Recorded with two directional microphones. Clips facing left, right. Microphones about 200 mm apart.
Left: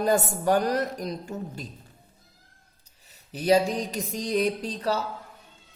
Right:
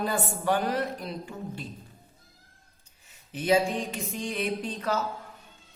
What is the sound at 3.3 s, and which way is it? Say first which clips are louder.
A woman's voice: left 3 dB; 35° left (ahead or behind).